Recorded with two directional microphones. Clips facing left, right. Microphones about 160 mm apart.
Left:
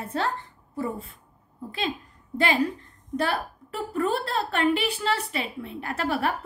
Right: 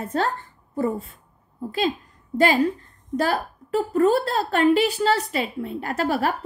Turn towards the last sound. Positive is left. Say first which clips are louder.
# right 4 dB
turn(degrees=-40)  # may be behind; listen again after turning